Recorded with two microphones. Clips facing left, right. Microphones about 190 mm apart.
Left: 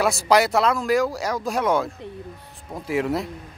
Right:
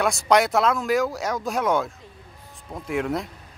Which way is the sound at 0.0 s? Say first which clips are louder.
Left 1 dB; centre (ahead or behind).